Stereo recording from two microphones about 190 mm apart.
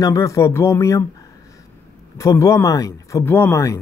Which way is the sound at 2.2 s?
15° left (ahead or behind).